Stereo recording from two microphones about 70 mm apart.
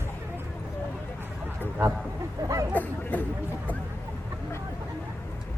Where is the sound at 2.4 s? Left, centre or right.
Right.